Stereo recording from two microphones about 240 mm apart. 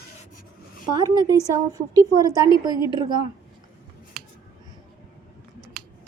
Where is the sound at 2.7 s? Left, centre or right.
Centre.